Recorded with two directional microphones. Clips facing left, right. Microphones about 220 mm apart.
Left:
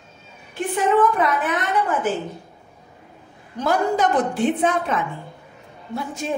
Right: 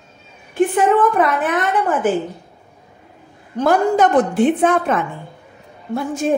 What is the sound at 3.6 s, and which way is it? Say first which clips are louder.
A woman's voice: right 5 dB; 55° right (ahead or behind).